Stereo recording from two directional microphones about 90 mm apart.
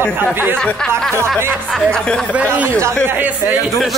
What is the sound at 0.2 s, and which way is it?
Speech, 25° right (ahead or behind).